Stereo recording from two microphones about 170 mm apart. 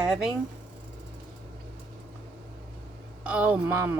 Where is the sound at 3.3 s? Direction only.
10° right (ahead or behind).